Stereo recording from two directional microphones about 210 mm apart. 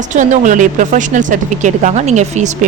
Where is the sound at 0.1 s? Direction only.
35° right (ahead or behind).